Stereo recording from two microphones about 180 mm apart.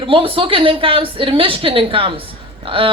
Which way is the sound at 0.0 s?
30° right (ahead or behind).